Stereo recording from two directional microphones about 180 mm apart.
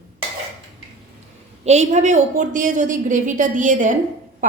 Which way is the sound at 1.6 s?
40° right (ahead or behind).